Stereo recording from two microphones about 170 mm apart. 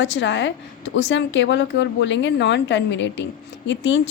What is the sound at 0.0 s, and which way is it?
A woman's voice, 90° left.